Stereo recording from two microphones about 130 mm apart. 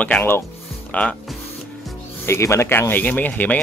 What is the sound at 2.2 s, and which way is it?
Speech, 20° left (ahead or behind).